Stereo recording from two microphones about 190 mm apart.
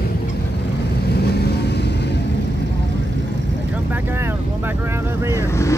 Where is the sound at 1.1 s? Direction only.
60° left (ahead or behind).